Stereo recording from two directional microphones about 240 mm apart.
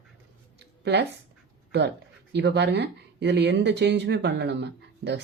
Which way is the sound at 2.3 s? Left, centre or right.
Right.